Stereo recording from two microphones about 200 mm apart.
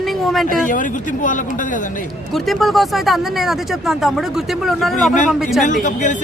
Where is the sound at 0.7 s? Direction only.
40° left (ahead or behind).